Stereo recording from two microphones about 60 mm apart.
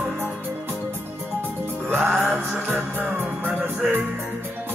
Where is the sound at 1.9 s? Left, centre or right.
Right.